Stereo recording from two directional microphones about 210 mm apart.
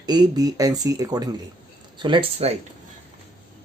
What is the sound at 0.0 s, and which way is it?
Speech, 20° right (ahead or behind).